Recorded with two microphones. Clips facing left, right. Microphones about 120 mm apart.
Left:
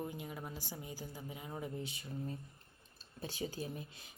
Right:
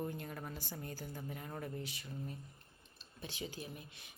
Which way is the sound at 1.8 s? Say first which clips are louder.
Left 3 dB; 25° left (ahead or behind).